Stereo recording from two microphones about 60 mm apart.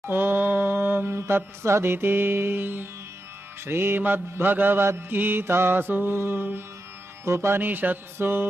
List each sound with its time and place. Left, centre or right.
0.0 s speech: right
3.6 s mantra: right
7.2 s speech: right
7.6 s mantra: right